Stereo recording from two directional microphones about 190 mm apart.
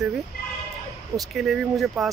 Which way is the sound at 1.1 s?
Centre (ahead or behind).